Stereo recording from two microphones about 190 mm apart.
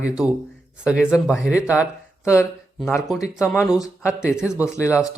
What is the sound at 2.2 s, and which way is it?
Speech, 15° left (ahead or behind).